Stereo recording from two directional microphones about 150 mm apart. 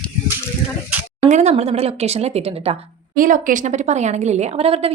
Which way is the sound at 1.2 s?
50° right (ahead or behind).